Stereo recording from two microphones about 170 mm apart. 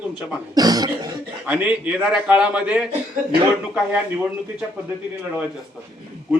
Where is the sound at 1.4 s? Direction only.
10° right (ahead or behind).